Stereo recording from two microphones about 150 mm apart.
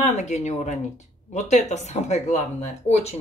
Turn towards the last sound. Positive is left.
turn(degrees=45)  # may be behind; listen again after turning